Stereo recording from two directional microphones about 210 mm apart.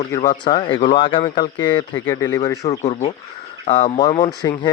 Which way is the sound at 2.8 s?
30° left (ahead or behind).